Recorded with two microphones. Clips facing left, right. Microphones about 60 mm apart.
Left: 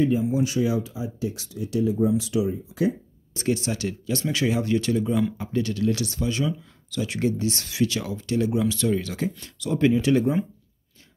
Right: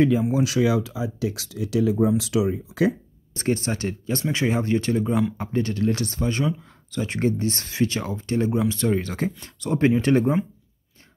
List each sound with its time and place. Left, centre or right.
0.0 s speech: right
3.3 s speech: right